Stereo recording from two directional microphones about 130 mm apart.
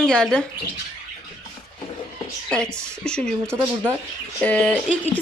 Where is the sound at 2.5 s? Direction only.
5° left (ahead or behind).